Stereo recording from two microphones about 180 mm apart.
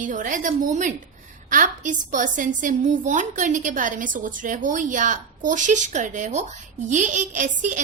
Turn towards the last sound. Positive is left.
turn(degrees=-45)  # may be behind; listen again after turning